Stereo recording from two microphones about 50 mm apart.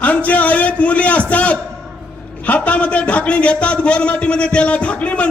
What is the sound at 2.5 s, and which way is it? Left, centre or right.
A man's voice, left.